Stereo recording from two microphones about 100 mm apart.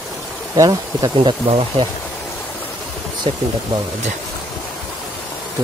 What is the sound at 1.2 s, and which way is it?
Speech, 60° right (ahead or behind).